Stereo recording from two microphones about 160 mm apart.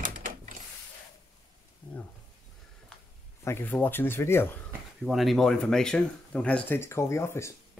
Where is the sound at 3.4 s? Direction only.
15° left (ahead or behind).